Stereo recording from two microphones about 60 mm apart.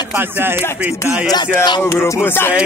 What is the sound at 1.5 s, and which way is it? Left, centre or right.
Speech, left.